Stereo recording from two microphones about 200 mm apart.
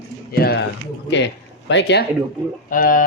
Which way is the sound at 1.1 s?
65° left (ahead or behind).